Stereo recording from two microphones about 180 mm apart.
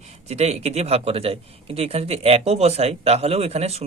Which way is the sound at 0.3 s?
35° right (ahead or behind).